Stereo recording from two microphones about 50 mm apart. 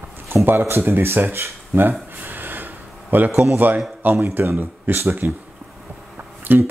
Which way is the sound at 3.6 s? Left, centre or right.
Right.